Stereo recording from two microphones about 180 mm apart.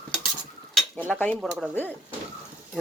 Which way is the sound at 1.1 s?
5° left (ahead or behind).